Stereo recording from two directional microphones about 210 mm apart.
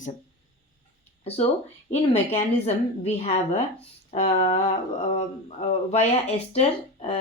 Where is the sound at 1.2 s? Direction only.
30° left (ahead or behind).